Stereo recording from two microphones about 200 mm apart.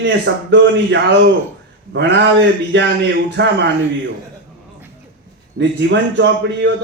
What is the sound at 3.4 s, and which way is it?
Speech, 60° right (ahead or behind).